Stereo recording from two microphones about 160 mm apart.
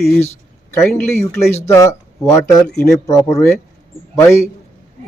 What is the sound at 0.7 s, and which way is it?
A man's voice, 15° left (ahead or behind).